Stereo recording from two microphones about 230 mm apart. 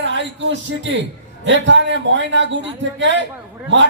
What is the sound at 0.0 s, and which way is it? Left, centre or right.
A man's voice, right.